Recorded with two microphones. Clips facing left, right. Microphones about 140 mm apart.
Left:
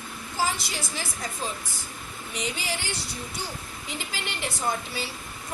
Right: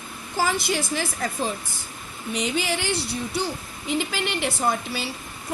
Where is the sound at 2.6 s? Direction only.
75° right (ahead or behind).